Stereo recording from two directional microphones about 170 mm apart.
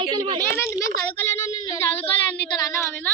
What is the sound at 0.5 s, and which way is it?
A child's voice, 15° left (ahead or behind).